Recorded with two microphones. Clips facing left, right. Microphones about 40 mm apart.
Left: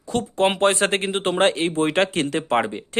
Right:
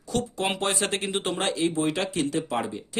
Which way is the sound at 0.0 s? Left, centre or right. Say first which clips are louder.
Left 7 dB; left.